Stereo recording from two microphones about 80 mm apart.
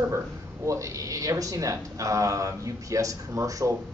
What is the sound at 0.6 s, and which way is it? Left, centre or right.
Speech, right.